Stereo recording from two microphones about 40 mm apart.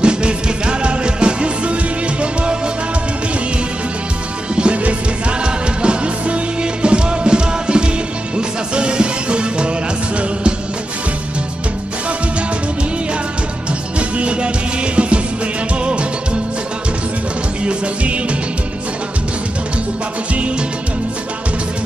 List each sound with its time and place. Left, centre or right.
0.0 s music: right
4.6 s music: right
13.7 s music: right
17.6 s music: right
20.3 s music: right